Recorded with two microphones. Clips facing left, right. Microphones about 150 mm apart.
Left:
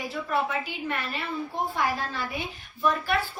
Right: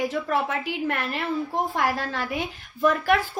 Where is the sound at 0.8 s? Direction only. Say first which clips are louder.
Right 4 dB; 70° right (ahead or behind).